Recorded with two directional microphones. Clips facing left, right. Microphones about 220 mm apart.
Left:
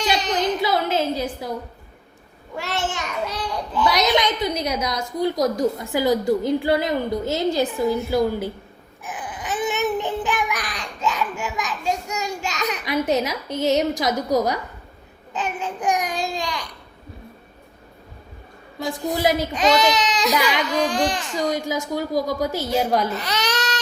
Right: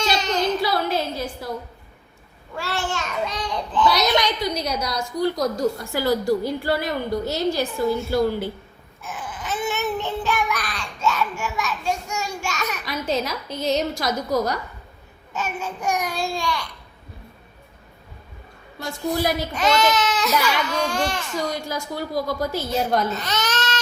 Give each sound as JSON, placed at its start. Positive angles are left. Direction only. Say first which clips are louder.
{"t": 0.0, "sound": "a sound", "louder": "even", "side_deg": 15}
{"t": 2.6, "sound": "babbling", "louder": "left 1 dB", "side_deg": 20}
{"t": 18.8, "sound": "babbling", "louder": "left 2 dB", "side_deg": 15}